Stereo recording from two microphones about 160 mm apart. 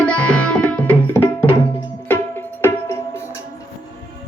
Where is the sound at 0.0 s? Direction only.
5° left (ahead or behind).